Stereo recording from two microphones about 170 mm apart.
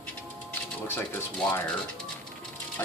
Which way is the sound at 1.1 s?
5° left (ahead or behind).